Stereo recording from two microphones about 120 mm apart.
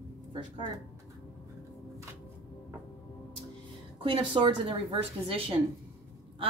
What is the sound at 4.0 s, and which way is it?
A woman's voice, 50° right (ahead or behind).